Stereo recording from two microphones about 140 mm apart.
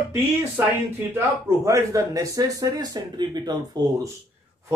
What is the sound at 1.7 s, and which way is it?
Speech, 25° right (ahead or behind).